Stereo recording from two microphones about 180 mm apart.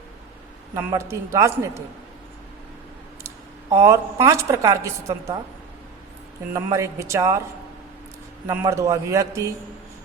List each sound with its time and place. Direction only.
0.7 s a woman's voice: 15° right (ahead or behind)
3.8 s a woman's voice: 15° right (ahead or behind)
6.5 s a woman's voice: 15° right (ahead or behind)
8.4 s a woman's voice: 20° right (ahead or behind)